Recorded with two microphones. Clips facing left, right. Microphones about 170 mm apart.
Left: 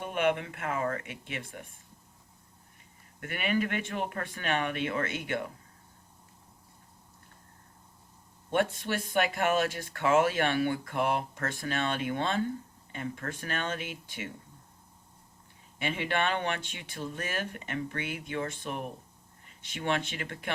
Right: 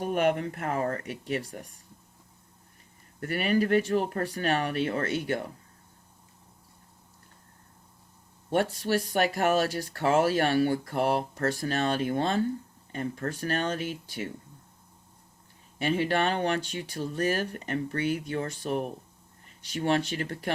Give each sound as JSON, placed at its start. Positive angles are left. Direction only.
{"t": 0.0, "sound": "speech", "side_deg": -40}
{"t": 3.2, "sound": "speech", "side_deg": -40}
{"t": 8.5, "sound": "speech", "side_deg": -35}
{"t": 15.8, "sound": "speech", "side_deg": -40}